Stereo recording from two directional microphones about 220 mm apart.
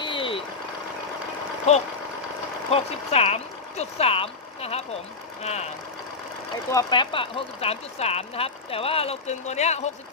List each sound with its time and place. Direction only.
0.0 s vehicle: 25° left (ahead or behind)
1.7 s speech: 30° left (ahead or behind)
6.7 s speech: 20° left (ahead or behind)